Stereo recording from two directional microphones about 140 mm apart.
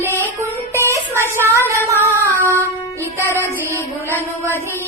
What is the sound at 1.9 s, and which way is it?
Female singing, 20° right (ahead or behind).